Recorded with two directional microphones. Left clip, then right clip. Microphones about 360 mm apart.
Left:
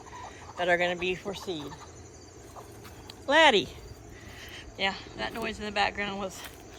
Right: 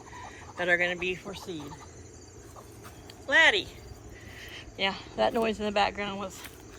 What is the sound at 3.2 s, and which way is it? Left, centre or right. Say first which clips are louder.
Speech: left 1 dB; centre.